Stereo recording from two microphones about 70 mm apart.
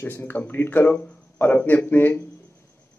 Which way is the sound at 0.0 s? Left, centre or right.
Left.